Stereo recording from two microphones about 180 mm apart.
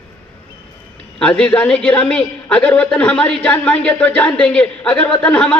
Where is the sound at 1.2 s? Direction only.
5° left (ahead or behind).